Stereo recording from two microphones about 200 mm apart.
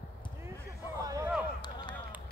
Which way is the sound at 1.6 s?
20° left (ahead or behind).